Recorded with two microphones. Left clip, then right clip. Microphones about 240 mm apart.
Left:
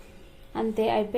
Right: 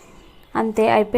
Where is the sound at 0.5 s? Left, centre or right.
Right.